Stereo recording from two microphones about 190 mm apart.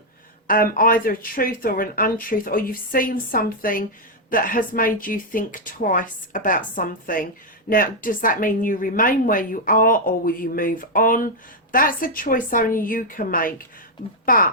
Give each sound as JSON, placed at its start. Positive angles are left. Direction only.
{"t": 0.4, "sound": "a woman's voice", "side_deg": 50}